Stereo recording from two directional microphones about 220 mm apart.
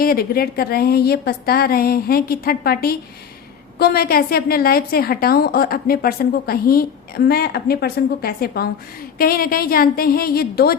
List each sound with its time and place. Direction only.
0.0 s a woman's voice: 45° left (ahead or behind)